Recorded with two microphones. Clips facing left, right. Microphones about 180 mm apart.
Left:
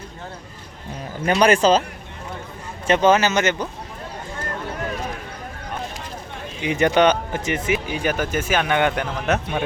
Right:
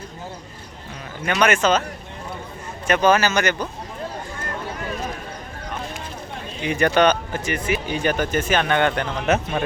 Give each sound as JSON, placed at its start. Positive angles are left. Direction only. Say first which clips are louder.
{"t": 1.2, "sound": "speech", "louder": "left 3 dB", "side_deg": 30}
{"t": 2.8, "sound": "speech", "louder": "left 1 dB", "side_deg": 25}
{"t": 6.6, "sound": "speech", "louder": "left 1 dB", "side_deg": 20}
{"t": 7.9, "sound": "speech", "louder": "right 1 dB", "side_deg": 5}